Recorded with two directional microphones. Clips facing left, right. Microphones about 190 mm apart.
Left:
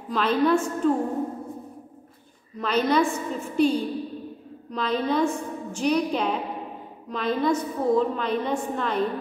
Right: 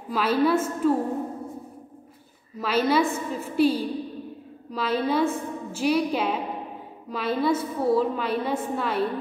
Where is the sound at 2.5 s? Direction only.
5° right (ahead or behind).